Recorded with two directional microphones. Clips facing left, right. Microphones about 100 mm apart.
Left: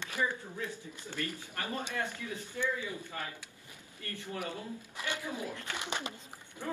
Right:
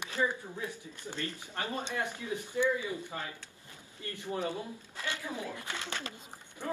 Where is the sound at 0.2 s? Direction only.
15° right (ahead or behind).